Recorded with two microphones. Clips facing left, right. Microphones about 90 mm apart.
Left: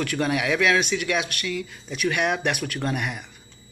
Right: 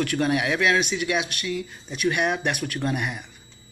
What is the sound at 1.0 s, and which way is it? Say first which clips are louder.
Speech: even; 45° left (ahead or behind).